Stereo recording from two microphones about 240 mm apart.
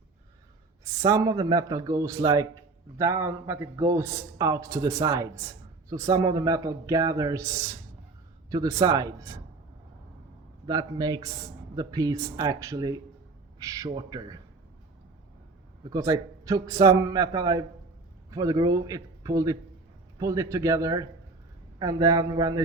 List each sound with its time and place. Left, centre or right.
0.9 s a man's voice: centre
10.7 s a man's voice: centre
15.9 s a man's voice: centre